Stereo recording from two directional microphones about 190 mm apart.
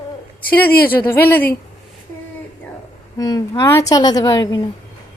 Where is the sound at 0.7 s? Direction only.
55° left (ahead or behind).